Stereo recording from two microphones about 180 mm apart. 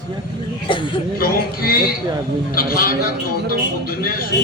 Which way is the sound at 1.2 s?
55° left (ahead or behind).